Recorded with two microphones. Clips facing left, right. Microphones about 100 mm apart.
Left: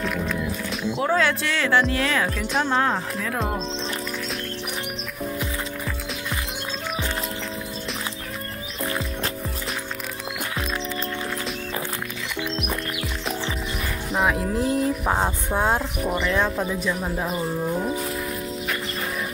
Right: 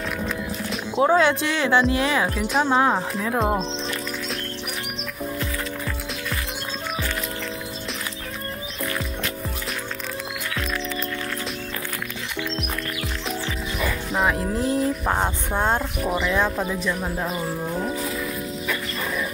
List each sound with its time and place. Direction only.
0.9 s speech: 20° right (ahead or behind)
8.8 s music: 30° left (ahead or behind)
14.1 s speech: centre (ahead or behind)